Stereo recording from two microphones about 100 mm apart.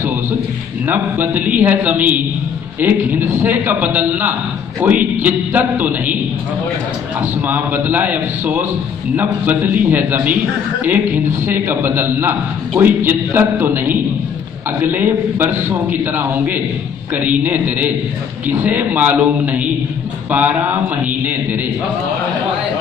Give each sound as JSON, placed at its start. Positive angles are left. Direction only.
{"t": 0.8, "sound": "a man's voice", "side_deg": -20}
{"t": 7.2, "sound": "a man's voice", "side_deg": -20}